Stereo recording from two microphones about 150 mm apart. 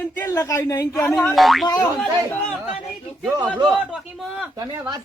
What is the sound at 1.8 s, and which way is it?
Speech, 10° left (ahead or behind).